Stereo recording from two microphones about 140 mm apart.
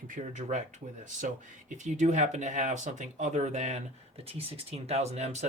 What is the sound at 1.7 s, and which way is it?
Speech, 60° right (ahead or behind).